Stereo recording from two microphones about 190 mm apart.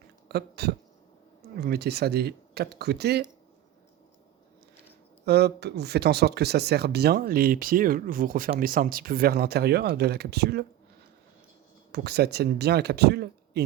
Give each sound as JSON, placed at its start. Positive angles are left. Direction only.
{"t": 0.3, "sound": "a sound", "side_deg": -60}
{"t": 1.6, "sound": "speech", "side_deg": -60}
{"t": 5.2, "sound": "speech", "side_deg": -60}
{"t": 11.9, "sound": "speech", "side_deg": -60}